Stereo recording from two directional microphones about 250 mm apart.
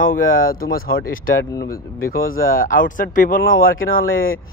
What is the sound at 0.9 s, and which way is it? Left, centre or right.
Speech, left.